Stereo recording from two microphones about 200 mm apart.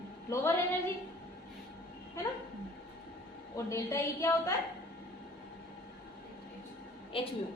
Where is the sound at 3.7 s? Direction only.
15° left (ahead or behind).